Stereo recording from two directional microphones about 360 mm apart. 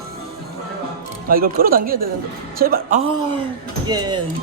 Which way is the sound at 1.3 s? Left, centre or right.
Right.